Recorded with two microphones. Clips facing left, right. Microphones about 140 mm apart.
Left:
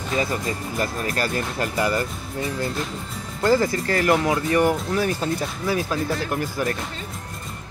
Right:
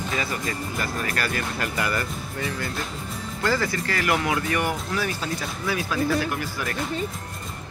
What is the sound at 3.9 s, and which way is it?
Speech, 35° left (ahead or behind).